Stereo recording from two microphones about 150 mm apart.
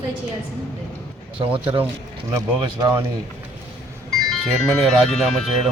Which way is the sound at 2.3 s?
25° right (ahead or behind).